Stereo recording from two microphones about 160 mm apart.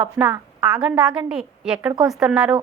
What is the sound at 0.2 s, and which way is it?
A woman's voice, 10° right (ahead or behind).